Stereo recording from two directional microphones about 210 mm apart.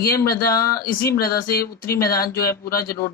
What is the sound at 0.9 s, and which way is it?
Speech, 45° left (ahead or behind).